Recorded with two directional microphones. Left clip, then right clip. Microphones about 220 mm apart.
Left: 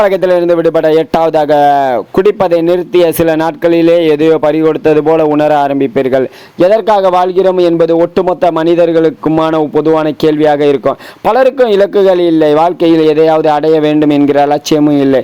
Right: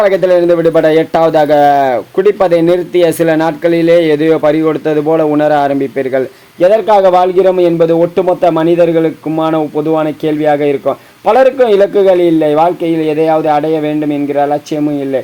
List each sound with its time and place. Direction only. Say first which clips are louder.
0.0 s speech: even; 30° left (ahead or behind)